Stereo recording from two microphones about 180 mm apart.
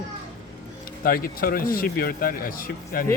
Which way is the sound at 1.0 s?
55° left (ahead or behind).